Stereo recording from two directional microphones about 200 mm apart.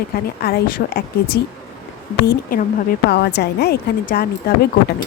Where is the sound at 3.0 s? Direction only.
55° left (ahead or behind).